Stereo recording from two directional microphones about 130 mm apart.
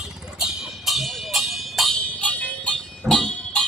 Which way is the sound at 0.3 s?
Centre (ahead or behind).